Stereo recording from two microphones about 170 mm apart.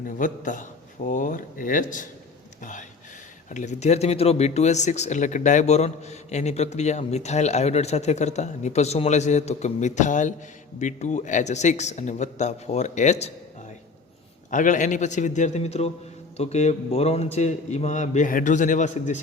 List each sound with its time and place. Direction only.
0.0 s a man's voice: 50° left (ahead or behind)
2.6 s a sound: 45° left (ahead or behind)
3.5 s a man's voice: 45° left (ahead or behind)
14.5 s a man's voice: 50° left (ahead or behind)